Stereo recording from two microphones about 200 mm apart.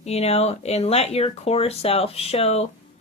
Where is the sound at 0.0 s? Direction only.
30° left (ahead or behind).